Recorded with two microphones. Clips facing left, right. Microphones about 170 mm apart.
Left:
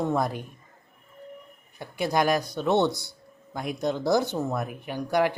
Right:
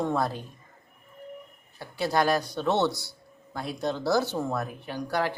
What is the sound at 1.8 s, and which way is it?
A man's voice, 20° left (ahead or behind).